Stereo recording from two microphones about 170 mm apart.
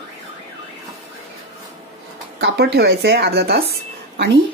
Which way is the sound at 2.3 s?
70° right (ahead or behind).